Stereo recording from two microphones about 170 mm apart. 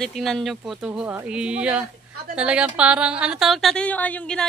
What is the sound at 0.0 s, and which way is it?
A woman's voice, centre (ahead or behind).